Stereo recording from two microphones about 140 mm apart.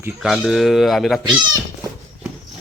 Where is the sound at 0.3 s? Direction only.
Centre (ahead or behind).